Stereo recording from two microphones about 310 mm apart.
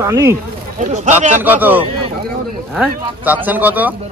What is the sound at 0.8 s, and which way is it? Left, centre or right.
Speech, right.